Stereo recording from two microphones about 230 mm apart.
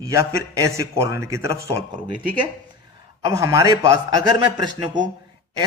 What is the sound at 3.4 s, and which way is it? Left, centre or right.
Speech, centre.